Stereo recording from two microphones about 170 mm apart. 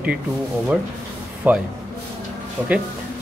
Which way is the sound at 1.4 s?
10° right (ahead or behind).